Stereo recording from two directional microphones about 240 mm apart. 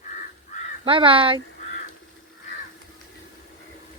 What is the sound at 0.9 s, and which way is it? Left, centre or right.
Speech, right.